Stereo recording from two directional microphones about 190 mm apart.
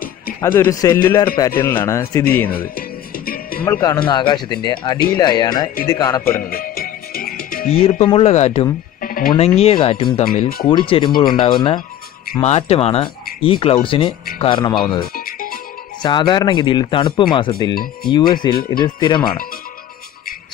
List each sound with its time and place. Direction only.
0.6 s speech: 15° left (ahead or behind)
3.3 s music: 50° left (ahead or behind)
3.6 s speech: 15° left (ahead or behind)
6.3 s music: 50° left (ahead or behind)
7.7 s speech: 35° left (ahead or behind)
9.0 s music: 50° left (ahead or behind)
9.6 s speech: 30° left (ahead or behind)
10.2 s speech: 45° left (ahead or behind)
10.7 s speech: 25° left (ahead or behind)
15.1 s music: 50° left (ahead or behind)
16.0 s speech: 25° left (ahead or behind)